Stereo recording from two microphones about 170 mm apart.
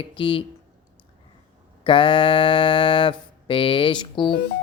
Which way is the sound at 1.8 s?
30° left (ahead or behind).